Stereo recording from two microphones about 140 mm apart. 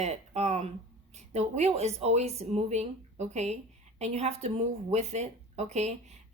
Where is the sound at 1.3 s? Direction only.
55° right (ahead or behind).